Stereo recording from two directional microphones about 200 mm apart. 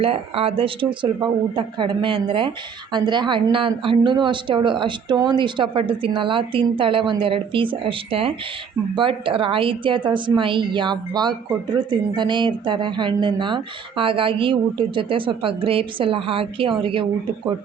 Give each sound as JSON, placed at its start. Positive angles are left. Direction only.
{"t": 0.0, "sound": "a woman's voice", "side_deg": -30}